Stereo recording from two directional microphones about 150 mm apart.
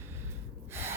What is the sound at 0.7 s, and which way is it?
Gasp, 15° right (ahead or behind).